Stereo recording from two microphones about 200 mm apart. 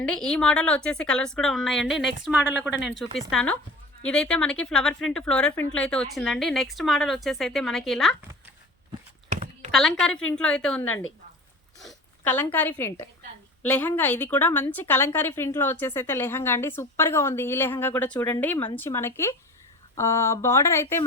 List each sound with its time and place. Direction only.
0.0 s speech: 5° left (ahead or behind)
9.3 s a sound: 35° right (ahead or behind)
9.7 s a woman's voice: 5° left (ahead or behind)